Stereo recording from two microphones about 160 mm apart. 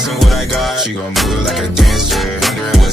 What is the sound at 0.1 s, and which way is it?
Music, centre (ahead or behind).